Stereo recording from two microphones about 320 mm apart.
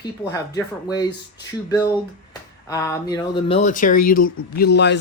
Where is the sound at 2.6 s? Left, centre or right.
Centre; by 4.9 s left.